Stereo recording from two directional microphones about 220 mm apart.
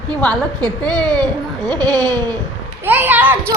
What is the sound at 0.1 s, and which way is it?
Speech, 5° left (ahead or behind).